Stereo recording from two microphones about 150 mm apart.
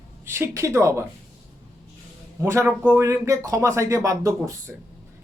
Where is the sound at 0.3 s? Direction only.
15° right (ahead or behind).